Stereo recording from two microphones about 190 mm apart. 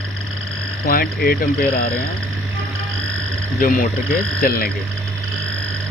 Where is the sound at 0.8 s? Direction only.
50° left (ahead or behind).